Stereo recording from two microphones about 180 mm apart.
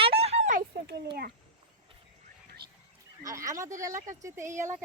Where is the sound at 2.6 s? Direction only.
60° right (ahead or behind).